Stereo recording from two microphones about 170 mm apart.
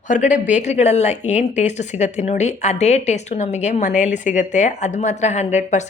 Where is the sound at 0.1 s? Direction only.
45° left (ahead or behind).